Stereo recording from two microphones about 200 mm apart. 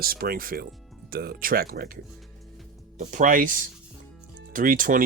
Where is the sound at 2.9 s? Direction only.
40° right (ahead or behind).